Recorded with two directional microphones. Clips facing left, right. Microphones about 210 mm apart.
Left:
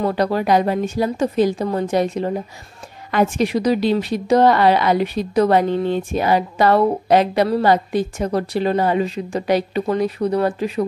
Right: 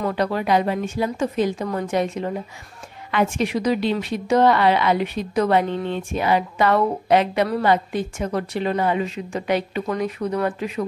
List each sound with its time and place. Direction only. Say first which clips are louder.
0.0 s a woman's voice: left 4 dB; 35° left (ahead or behind)